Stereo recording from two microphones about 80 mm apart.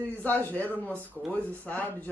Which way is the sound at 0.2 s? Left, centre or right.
Left.